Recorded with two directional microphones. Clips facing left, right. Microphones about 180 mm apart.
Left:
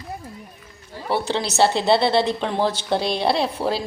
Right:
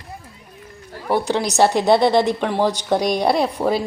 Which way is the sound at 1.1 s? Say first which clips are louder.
Right 3 dB; 15° right (ahead or behind).